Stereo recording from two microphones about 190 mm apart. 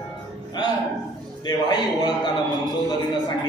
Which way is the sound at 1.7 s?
20° left (ahead or behind).